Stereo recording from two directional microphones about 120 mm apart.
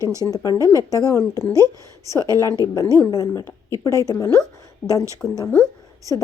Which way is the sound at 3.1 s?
30° left (ahead or behind).